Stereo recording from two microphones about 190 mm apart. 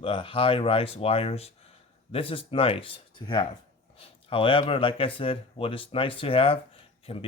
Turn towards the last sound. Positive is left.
turn(degrees=35)  # may be behind; listen again after turning